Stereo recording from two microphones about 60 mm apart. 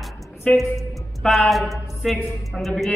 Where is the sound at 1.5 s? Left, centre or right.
Centre.